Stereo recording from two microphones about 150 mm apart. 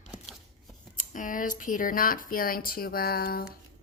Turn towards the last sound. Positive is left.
turn(degrees=85)